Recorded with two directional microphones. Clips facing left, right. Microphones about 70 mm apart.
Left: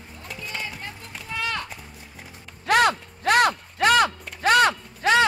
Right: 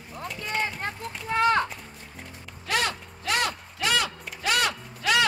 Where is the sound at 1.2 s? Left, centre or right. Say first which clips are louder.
Right 8 dB; right.